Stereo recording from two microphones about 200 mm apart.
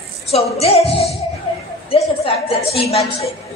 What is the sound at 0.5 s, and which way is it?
A man's voice, 30° left (ahead or behind).